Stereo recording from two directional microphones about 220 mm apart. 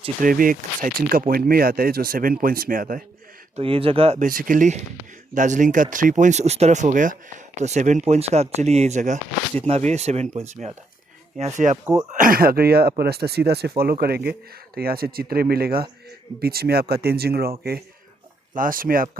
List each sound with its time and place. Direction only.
0.2 s speech: 40° right (ahead or behind)
3.5 s speech: 25° right (ahead or behind); by 17.5 s 45° right (ahead or behind)
18.5 s speech: 40° right (ahead or behind)